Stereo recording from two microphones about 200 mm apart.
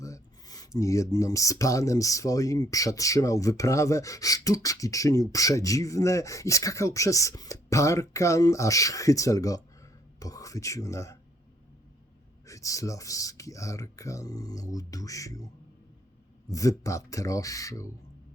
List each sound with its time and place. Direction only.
0.0 s speech: 15° left (ahead or behind)
12.5 s speech: 15° left (ahead or behind)
16.5 s speech: 15° left (ahead or behind)